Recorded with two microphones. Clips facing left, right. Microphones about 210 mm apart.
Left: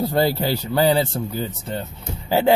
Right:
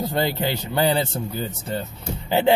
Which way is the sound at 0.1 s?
40° left (ahead or behind).